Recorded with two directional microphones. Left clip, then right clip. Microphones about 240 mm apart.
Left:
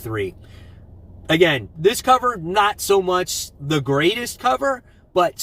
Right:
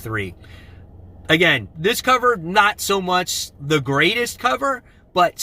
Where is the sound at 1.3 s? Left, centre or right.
Centre.